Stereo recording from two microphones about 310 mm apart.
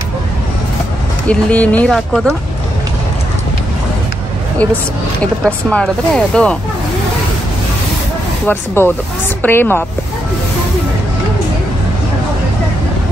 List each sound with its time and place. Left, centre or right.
1.2 s speech: centre
5.2 s speech: centre
8.5 s a woman's voice: centre